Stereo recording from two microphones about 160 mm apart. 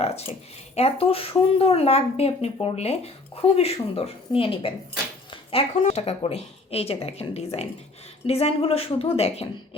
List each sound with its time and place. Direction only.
0.0 s a sound: 40° left (ahead or behind)
0.8 s speech: 40° left (ahead or behind)
5.3 s dishes: 35° left (ahead or behind)
5.8 s speech: 40° left (ahead or behind)